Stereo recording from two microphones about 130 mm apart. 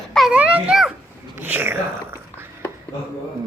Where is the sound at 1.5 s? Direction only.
15° right (ahead or behind).